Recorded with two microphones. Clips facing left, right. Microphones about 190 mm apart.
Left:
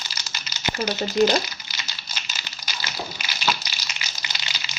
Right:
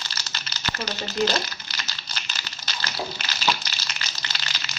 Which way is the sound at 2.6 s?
10° left (ahead or behind).